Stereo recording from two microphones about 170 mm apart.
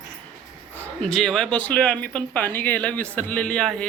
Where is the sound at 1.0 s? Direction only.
5° left (ahead or behind).